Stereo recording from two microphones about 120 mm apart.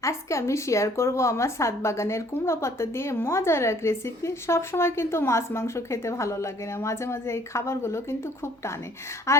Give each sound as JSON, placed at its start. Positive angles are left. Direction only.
{"t": 0.0, "sound": "a woman's voice", "side_deg": 25}
{"t": 9.3, "sound": "a woman's voice", "side_deg": 25}